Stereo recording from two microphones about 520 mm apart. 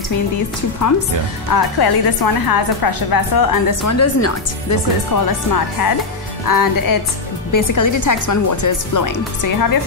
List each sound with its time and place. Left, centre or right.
1.5 s speech: left